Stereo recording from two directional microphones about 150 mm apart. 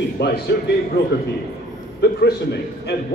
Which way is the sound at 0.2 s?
90° left.